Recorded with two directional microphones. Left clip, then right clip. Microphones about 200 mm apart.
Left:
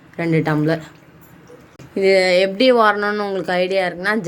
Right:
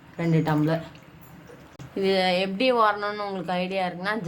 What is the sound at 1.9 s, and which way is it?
Speech, 20° left (ahead or behind).